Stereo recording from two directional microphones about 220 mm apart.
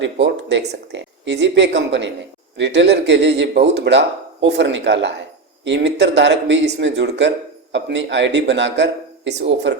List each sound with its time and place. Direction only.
0.0 s speech: 55° right (ahead or behind)